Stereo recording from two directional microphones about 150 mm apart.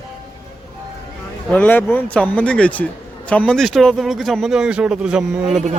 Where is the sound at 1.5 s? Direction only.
10° left (ahead or behind).